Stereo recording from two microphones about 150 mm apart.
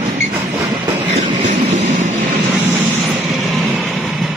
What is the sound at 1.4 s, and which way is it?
Train, 55° right (ahead or behind).